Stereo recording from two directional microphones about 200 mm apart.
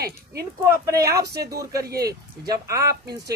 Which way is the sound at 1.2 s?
55° right (ahead or behind).